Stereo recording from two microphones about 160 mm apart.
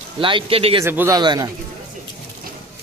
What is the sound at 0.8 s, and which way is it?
Speech, 15° right (ahead or behind).